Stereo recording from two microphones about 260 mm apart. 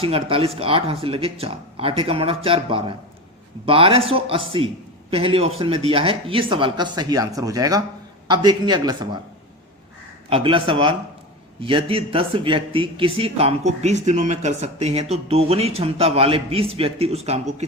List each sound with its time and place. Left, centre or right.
0.0 s speech: right
10.2 s speech: right